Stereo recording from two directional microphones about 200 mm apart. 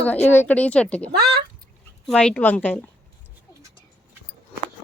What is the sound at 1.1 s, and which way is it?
Speech, 55° right (ahead or behind).